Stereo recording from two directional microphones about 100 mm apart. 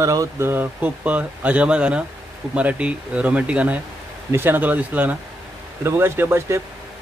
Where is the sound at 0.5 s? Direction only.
20° right (ahead or behind).